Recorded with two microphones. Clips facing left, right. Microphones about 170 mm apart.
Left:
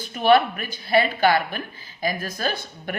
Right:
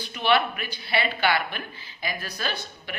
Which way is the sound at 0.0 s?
45° left (ahead or behind).